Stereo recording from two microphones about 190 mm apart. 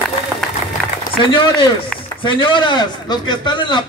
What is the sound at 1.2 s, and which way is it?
Speech, 25° left (ahead or behind).